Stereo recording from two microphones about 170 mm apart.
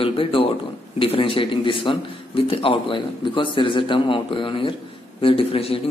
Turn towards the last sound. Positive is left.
turn(degrees=35)  # may be behind; listen again after turning